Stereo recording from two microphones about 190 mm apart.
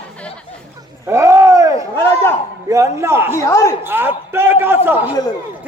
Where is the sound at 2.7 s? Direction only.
15° right (ahead or behind).